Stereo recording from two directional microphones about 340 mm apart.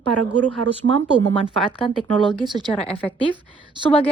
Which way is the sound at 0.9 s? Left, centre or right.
Centre.